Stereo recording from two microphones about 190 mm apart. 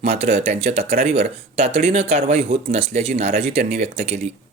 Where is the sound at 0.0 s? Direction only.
35° right (ahead or behind).